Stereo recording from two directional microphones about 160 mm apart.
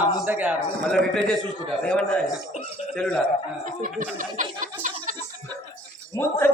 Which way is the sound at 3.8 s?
55° right (ahead or behind).